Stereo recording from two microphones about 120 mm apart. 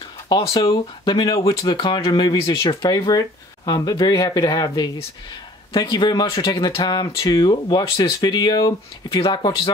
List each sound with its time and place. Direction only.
0.6 s speech: 35° left (ahead or behind)